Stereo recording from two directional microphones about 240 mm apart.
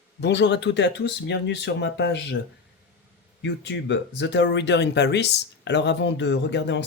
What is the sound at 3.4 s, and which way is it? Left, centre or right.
Speech, left.